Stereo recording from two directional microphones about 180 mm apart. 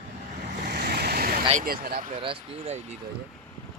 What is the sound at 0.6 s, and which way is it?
Vehicle, 65° right (ahead or behind).